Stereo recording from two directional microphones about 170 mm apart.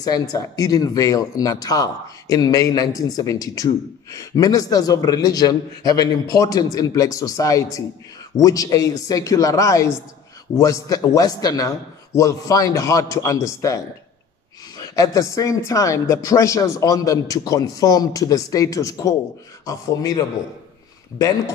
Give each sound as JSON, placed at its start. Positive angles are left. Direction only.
{"t": 0.0, "sound": "speech", "side_deg": 20}
{"t": 14.8, "sound": "speech", "side_deg": 20}